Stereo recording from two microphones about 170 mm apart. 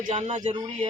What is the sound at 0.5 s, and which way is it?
Speech, 25° right (ahead or behind).